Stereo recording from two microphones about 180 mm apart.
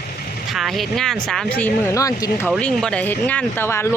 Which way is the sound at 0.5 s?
Centre (ahead or behind).